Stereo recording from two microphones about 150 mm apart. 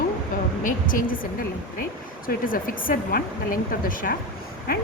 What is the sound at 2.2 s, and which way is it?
Speech, 65° left (ahead or behind).